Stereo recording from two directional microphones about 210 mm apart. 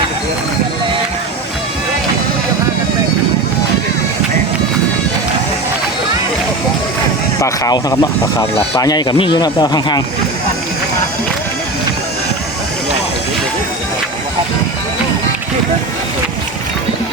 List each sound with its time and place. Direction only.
7.4 s speech: 15° left (ahead or behind)